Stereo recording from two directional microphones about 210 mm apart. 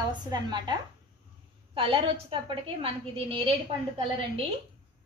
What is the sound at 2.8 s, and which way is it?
Speech, 25° right (ahead or behind).